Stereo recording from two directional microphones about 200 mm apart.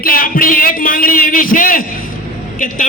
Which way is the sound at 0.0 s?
45° left (ahead or behind).